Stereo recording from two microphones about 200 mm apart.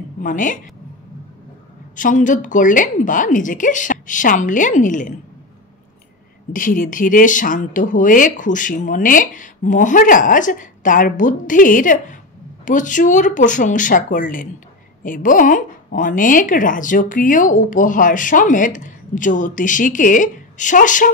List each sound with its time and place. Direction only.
0.2 s speech: 40° left (ahead or behind)
2.0 s speech: 40° left (ahead or behind)
6.5 s speech: 45° left (ahead or behind)